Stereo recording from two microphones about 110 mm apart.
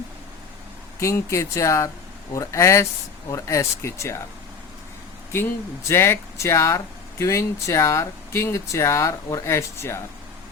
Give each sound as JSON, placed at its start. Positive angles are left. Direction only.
{"t": 0.9, "sound": "speech", "side_deg": 25}
{"t": 5.9, "sound": "speech", "side_deg": 25}